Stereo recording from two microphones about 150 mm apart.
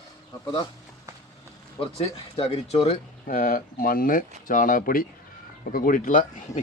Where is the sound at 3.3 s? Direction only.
70° left (ahead or behind).